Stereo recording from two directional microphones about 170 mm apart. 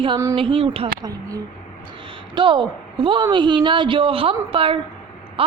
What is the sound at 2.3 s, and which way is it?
A woman's voice, 30° right (ahead or behind).